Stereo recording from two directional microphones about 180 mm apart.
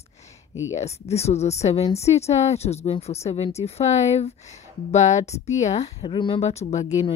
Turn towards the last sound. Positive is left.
turn(degrees=35)  # may be behind; listen again after turning